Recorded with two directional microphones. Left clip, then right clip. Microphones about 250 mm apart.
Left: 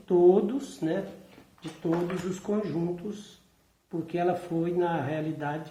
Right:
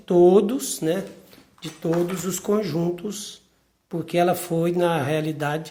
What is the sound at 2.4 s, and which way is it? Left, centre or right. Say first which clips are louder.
Speech: right 8 dB; right.